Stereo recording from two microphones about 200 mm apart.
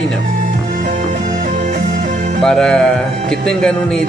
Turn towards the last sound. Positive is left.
turn(degrees=5)  # may be behind; listen again after turning